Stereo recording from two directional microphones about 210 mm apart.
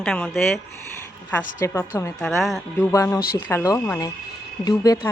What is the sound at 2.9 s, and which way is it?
A woman's voice, 15° left (ahead or behind).